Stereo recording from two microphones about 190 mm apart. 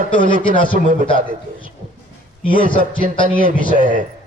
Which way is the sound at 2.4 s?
25° left (ahead or behind).